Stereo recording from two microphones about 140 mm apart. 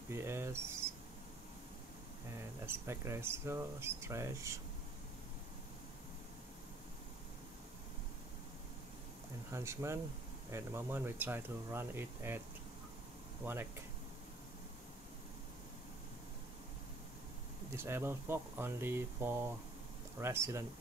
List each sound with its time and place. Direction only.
0.1 s speech: 20° right (ahead or behind)
2.6 s speech: 20° right (ahead or behind)
9.5 s speech: 20° right (ahead or behind)
13.5 s speech: 15° right (ahead or behind)
17.6 s speech: 15° right (ahead or behind)